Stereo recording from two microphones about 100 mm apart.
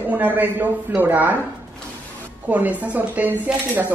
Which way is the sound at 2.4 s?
15° right (ahead or behind).